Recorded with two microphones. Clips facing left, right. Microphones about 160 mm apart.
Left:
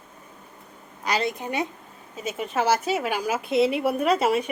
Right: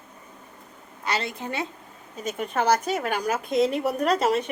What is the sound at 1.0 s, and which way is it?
Speech, 15° left (ahead or behind).